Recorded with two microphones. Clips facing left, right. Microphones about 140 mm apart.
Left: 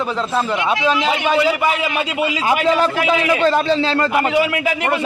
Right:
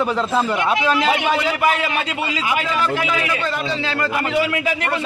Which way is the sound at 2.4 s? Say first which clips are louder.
Left 6 dB; 30° left (ahead or behind).